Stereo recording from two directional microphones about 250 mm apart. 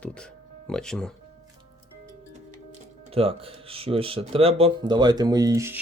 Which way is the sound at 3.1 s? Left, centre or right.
Right.